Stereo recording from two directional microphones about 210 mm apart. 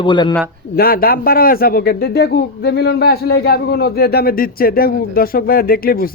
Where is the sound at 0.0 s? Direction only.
20° left (ahead or behind).